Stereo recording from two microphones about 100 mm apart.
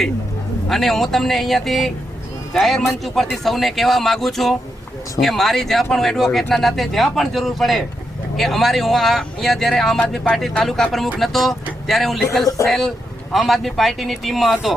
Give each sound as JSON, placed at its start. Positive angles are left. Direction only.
{"t": 0.7, "sound": "speech", "side_deg": 0}